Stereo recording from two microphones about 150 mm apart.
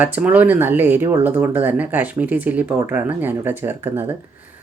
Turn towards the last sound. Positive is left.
turn(degrees=-15)  # may be behind; listen again after turning